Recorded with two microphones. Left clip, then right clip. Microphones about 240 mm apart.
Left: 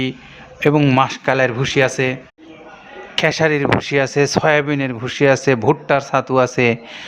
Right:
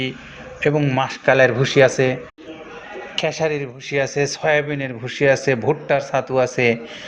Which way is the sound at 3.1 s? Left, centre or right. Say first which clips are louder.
Left 5 dB; left.